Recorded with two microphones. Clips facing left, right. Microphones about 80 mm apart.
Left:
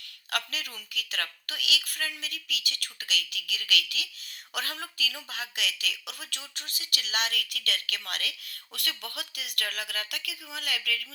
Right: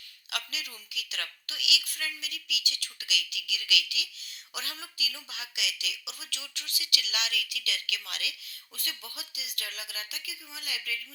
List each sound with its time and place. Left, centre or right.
0.3 s a woman's voice: left